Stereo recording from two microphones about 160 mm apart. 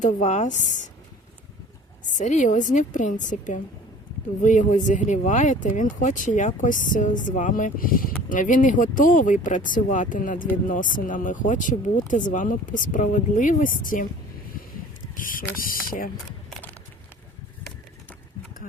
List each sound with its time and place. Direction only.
0.0 s speech: 45° left (ahead or behind)
2.1 s speech: 50° left (ahead or behind)
15.1 s speech: 60° left (ahead or behind)